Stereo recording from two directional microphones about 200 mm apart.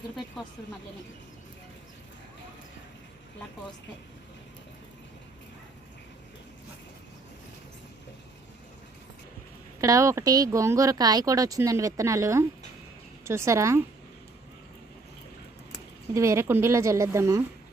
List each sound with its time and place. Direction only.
9.8 s speech: 15° right (ahead or behind)
16.1 s speech: 15° right (ahead or behind)